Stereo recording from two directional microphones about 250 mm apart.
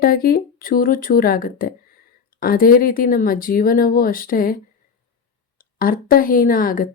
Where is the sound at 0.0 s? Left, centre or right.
Left.